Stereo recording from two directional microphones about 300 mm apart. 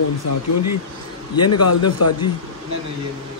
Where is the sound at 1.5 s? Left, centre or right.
Left.